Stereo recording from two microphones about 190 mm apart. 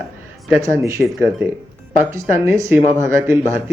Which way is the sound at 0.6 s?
15° right (ahead or behind).